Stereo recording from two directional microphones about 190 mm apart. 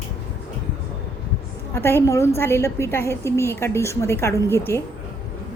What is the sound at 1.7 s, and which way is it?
A woman's voice, 15° left (ahead or behind).